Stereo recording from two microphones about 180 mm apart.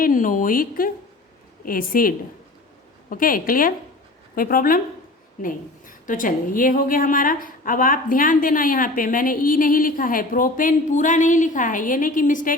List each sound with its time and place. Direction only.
0.0 s a woman's voice: 50° left (ahead or behind)